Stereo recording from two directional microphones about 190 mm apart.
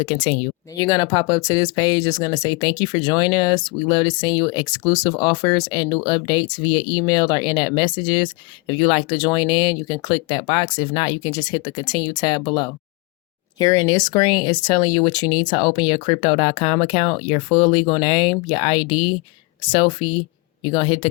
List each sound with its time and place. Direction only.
0.8 s speech: 20° left (ahead or behind)